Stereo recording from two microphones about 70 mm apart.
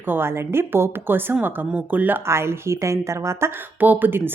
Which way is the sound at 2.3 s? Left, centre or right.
Right.